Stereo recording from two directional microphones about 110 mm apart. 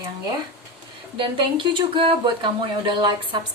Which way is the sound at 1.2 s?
45° right (ahead or behind).